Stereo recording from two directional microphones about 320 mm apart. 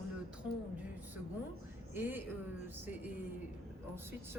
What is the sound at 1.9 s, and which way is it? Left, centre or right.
Speech, centre.